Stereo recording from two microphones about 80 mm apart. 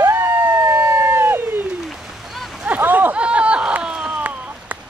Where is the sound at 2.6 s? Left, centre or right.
Right.